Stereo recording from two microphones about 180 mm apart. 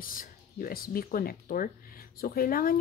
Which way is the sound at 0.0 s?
50° left (ahead or behind).